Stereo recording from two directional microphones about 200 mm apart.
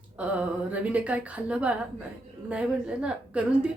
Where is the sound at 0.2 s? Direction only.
5° right (ahead or behind).